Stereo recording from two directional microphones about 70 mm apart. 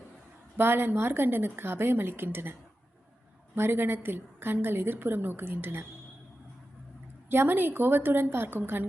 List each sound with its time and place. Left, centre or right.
0.5 s a woman's voice: right
7.3 s a woman's voice: right